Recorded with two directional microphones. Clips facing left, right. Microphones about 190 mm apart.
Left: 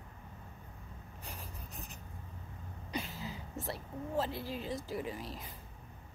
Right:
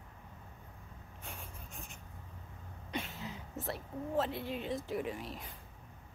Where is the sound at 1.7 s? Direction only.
35° left (ahead or behind).